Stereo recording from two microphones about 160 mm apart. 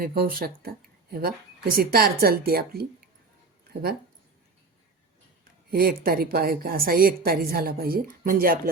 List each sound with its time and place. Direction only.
0.0 s a woman's voice: 70° right (ahead or behind)
5.7 s a woman's voice: 70° right (ahead or behind)